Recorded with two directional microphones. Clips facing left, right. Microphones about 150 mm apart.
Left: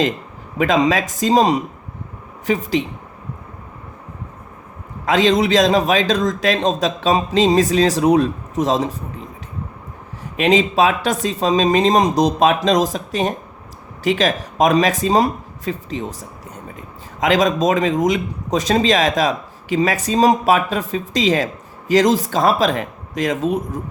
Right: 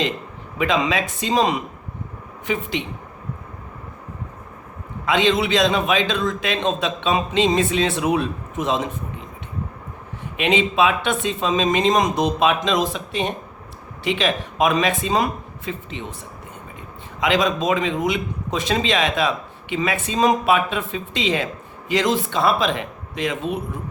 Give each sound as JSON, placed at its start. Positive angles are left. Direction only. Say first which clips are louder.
{"t": 0.6, "sound": "a man's voice", "louder": "left 5 dB", "side_deg": 40}
{"t": 5.0, "sound": "a man's voice", "louder": "left 4 dB", "side_deg": 40}
{"t": 10.3, "sound": "a man's voice", "louder": "left 4 dB", "side_deg": 40}
{"t": 17.2, "sound": "a man's voice", "louder": "left 4 dB", "side_deg": 40}